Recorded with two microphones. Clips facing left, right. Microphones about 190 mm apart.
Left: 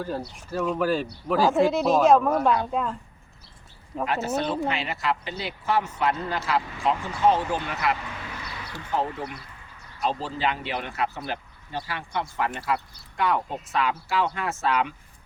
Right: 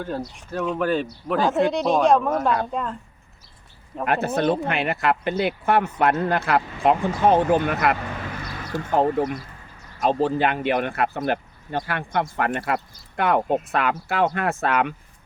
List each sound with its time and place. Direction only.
0.0 s speech: centre (ahead or behind)
4.0 s speech: 60° right (ahead or behind)